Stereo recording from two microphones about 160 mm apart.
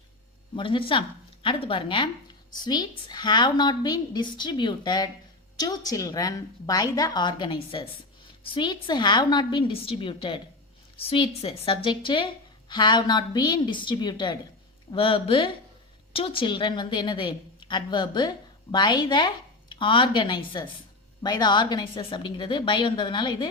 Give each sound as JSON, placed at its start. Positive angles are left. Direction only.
{"t": 0.5, "sound": "a woman's voice", "side_deg": 30}